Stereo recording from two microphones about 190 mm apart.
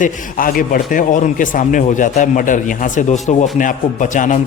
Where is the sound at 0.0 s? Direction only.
45° left (ahead or behind).